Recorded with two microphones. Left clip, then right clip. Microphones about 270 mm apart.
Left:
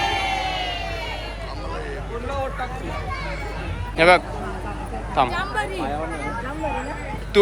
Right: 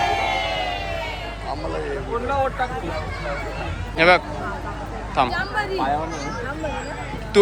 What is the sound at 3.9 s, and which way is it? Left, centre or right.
Speech, centre.